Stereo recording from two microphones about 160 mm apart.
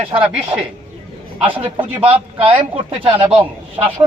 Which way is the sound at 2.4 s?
35° right (ahead or behind).